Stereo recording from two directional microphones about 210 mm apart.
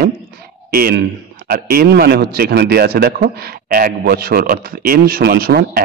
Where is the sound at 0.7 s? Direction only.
45° right (ahead or behind).